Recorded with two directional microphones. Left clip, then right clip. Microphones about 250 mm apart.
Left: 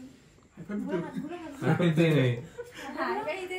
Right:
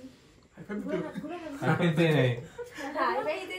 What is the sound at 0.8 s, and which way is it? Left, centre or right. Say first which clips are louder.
A man's voice: even; centre.